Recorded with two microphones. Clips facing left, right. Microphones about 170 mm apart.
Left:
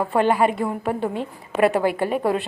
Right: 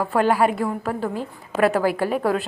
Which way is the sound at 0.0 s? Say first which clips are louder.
Even; centre (ahead or behind).